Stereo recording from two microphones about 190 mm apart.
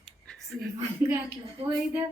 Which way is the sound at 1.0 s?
10° right (ahead or behind).